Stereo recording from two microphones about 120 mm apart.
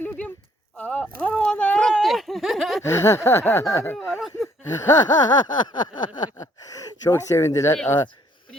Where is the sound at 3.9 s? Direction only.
Centre (ahead or behind).